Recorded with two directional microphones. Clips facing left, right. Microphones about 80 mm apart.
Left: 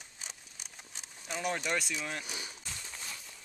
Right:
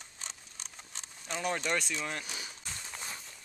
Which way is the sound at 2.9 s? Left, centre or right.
Right.